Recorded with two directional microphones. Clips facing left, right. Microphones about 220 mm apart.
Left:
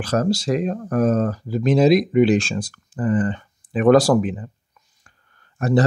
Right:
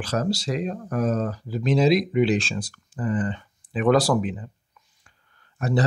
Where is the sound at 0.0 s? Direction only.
50° left (ahead or behind).